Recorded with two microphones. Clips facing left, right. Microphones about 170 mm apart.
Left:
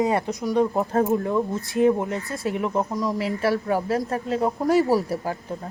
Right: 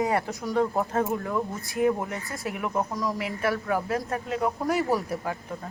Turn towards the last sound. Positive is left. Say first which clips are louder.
# left 4 dB
turn(degrees=35)  # may be behind; listen again after turning